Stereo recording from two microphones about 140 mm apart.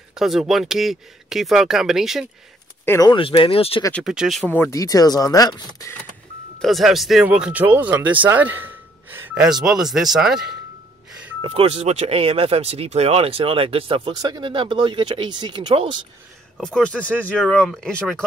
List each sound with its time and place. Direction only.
0.1 s speech: 5° right (ahead or behind)
2.8 s speech: 15° left (ahead or behind)
3.1 s speech: 40° left (ahead or behind)
4.0 s speech: 5° right (ahead or behind)
4.5 s speech: 20° left (ahead or behind)
6.6 s speech: centre (ahead or behind)
9.4 s speech: 5° right (ahead or behind)
11.4 s speech: 45° right (ahead or behind)
14.1 s speech: 30° right (ahead or behind)
16.5 s speech: 5° left (ahead or behind)